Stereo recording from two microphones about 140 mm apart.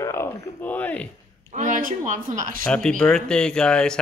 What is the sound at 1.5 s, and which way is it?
Speech, 65° right (ahead or behind).